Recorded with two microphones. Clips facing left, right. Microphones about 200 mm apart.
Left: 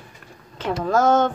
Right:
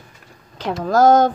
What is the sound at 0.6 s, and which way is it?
Speech, 35° right (ahead or behind).